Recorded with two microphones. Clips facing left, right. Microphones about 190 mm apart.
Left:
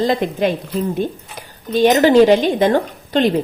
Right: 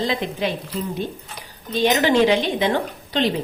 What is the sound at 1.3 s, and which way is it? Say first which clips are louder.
Speech: left 7 dB; 45° left (ahead or behind).